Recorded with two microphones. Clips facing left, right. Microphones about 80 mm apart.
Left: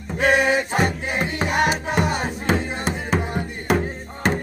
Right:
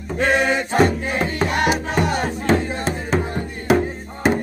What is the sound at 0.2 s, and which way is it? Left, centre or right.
Music, centre.